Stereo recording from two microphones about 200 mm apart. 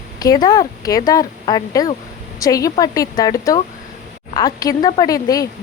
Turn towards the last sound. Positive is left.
turn(degrees=15)  # may be behind; listen again after turning